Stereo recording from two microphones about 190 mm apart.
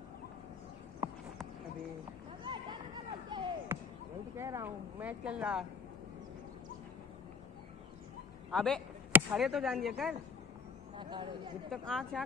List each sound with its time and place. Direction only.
2.4 s a sound: 25° right (ahead or behind)
3.7 s basketball bounce: 10° right (ahead or behind)
4.4 s a woman's voice: 15° right (ahead or behind)
8.5 s speech: 5° left (ahead or behind)
11.0 s speech: 25° right (ahead or behind)
11.7 s speech: 5° left (ahead or behind)